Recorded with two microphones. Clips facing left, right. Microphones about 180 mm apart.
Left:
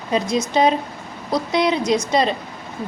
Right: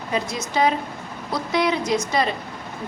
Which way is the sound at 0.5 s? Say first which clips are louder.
Left 2 dB; 25° left (ahead or behind).